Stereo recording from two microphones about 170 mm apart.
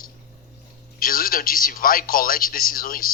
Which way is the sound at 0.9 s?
60° left (ahead or behind).